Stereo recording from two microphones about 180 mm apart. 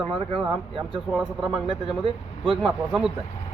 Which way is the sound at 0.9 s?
Centre (ahead or behind).